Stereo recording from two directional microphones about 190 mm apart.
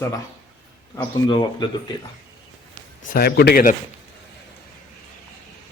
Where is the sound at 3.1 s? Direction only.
55° left (ahead or behind).